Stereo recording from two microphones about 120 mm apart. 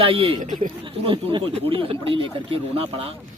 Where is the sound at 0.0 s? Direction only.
50° right (ahead or behind).